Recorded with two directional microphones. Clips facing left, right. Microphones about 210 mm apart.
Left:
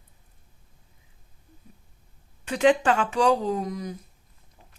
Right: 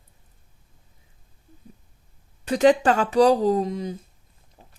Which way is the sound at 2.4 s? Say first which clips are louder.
Right 3 dB; 40° right (ahead or behind).